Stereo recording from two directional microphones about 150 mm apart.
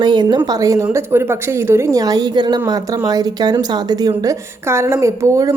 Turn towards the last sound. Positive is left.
turn(degrees=-20)  # may be behind; listen again after turning